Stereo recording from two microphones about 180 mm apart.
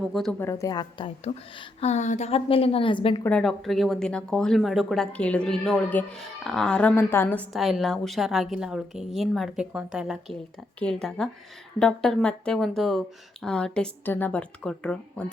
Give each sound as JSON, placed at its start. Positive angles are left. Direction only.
{"t": 0.0, "sound": "speech", "side_deg": 0}
{"t": 1.8, "sound": "a woman's voice", "side_deg": 40}
{"t": 3.2, "sound": "speech", "side_deg": 5}